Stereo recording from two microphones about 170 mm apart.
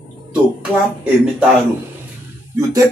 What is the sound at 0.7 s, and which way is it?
Speech, 10° right (ahead or behind).